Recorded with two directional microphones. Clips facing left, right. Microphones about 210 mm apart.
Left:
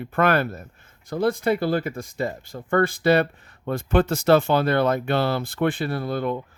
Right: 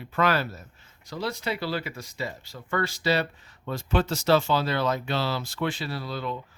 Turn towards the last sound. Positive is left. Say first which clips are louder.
# left 7 dB
turn(degrees=55)  # may be behind; listen again after turning